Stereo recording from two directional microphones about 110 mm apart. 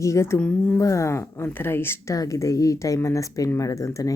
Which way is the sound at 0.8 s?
30° left (ahead or behind).